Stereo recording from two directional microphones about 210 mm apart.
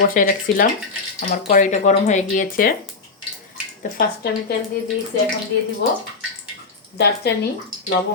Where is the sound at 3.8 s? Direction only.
40° left (ahead or behind).